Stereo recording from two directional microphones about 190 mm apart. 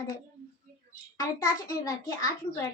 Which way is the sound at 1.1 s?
20° left (ahead or behind).